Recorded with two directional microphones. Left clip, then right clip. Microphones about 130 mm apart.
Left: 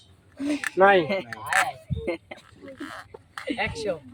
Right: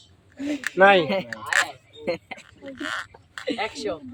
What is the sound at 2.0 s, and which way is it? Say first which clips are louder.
Speech: right 3 dB; 65° right (ahead or behind).